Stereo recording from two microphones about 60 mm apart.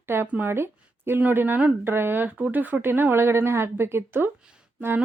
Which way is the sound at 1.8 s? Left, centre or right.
Right.